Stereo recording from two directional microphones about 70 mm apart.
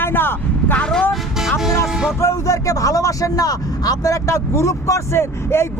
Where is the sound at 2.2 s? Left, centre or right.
Left.